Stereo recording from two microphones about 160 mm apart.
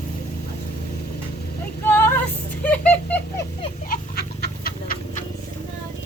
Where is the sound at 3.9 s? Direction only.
75° left (ahead or behind).